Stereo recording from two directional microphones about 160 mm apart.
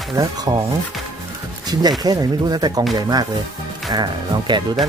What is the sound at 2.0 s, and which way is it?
Speech, 25° right (ahead or behind).